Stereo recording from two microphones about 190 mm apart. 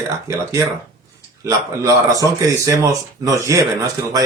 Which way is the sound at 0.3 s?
15° right (ahead or behind).